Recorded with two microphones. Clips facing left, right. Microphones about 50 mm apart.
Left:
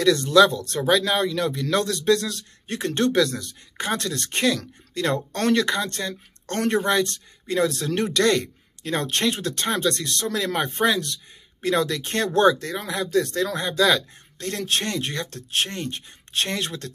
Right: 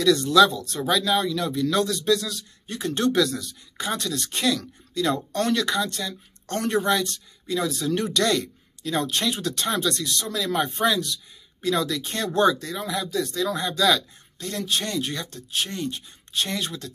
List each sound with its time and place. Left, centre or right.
0.0 s speech: left
14.5 s speech: left
15.2 s speech: left